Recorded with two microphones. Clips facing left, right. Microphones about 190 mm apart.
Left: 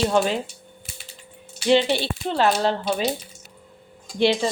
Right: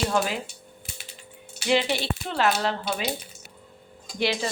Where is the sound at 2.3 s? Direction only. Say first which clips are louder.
Left 4 dB; 30° left (ahead or behind).